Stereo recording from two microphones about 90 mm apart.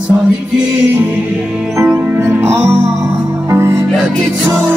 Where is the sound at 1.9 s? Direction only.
10° right (ahead or behind).